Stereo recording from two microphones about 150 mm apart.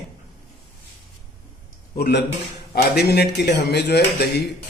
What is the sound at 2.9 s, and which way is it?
Speech, 90° left.